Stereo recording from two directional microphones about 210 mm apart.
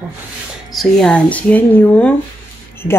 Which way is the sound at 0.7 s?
Centre (ahead or behind).